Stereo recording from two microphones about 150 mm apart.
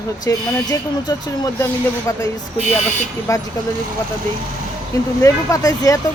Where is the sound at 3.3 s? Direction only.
20° left (ahead or behind).